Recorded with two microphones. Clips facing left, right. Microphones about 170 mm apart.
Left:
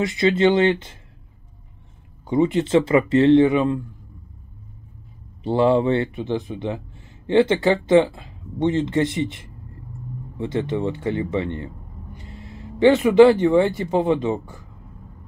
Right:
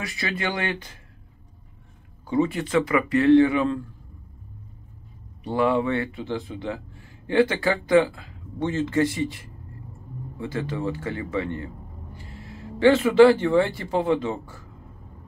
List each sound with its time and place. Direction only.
0.0 s speech: 20° left (ahead or behind)
2.2 s speech: 20° left (ahead or behind)
5.4 s speech: 25° left (ahead or behind)